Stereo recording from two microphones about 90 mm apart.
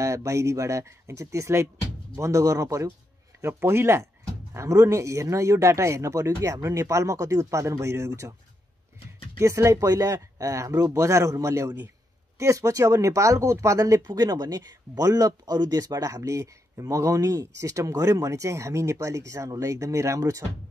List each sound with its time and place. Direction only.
0.0 s speech: 35° right (ahead or behind)
9.4 s speech: 35° right (ahead or behind)